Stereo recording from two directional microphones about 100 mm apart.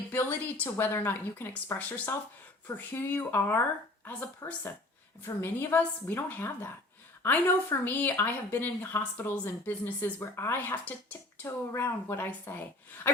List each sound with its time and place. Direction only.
0.1 s speech: 20° left (ahead or behind)
4.4 s speech: 30° left (ahead or behind)
13.1 s a sound: 20° left (ahead or behind)